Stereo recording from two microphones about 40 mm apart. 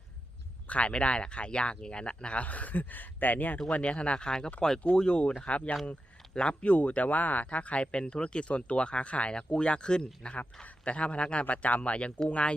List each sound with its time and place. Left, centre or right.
0.7 s speech: left
3.7 s speech: left